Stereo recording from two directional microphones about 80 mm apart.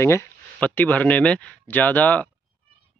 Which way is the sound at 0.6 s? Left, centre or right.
Left.